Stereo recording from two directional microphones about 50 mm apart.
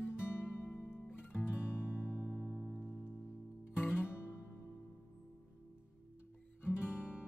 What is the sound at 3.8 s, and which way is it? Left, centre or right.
Music, left.